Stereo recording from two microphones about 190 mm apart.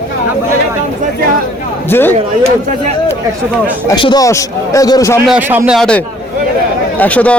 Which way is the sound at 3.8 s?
25° left (ahead or behind).